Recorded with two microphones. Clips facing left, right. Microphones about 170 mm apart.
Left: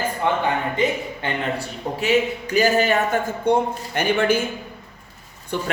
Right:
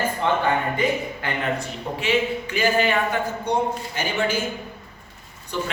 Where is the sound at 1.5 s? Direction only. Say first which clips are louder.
Left 2 dB; 40° left (ahead or behind).